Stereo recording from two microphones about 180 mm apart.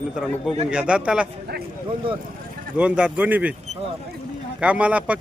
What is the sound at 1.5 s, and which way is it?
Speech, 65° right (ahead or behind).